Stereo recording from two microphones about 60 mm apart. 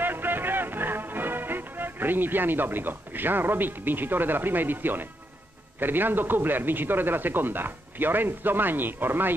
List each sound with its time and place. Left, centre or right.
0.0 s music: right
5.8 s speech: right